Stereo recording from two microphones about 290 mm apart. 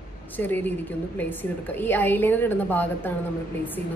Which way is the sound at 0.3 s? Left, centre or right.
Centre.